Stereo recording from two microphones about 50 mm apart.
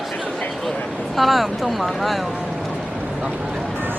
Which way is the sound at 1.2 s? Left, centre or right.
Centre.